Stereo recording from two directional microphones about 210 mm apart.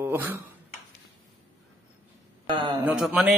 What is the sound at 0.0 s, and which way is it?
Speech, 10° right (ahead or behind).